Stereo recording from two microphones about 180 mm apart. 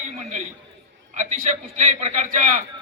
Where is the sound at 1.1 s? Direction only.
40° right (ahead or behind).